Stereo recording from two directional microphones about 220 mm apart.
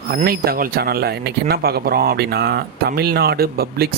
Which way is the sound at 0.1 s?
40° right (ahead or behind).